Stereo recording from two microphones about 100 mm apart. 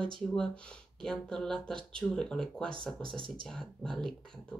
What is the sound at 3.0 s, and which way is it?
Speech, 60° right (ahead or behind).